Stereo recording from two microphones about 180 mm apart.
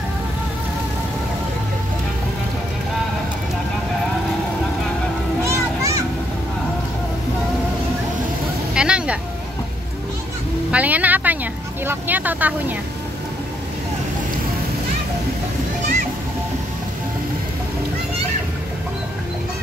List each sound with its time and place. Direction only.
5.4 s children playing: 15° right (ahead or behind)
8.7 s vehicle: 5° right (ahead or behind)
10.7 s vehicle: 10° right (ahead or behind)
11.8 s speech: 10° right (ahead or behind)